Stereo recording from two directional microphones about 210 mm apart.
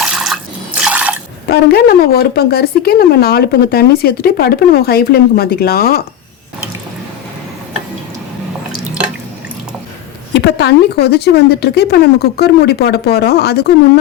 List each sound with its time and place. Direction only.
0.0 s water: 5° right (ahead or behind)
1.5 s a woman's voice: 45° left (ahead or behind)
10.3 s a woman's voice: 55° left (ahead or behind)